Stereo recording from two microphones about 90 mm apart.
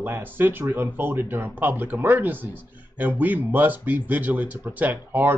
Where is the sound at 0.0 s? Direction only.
20° right (ahead or behind).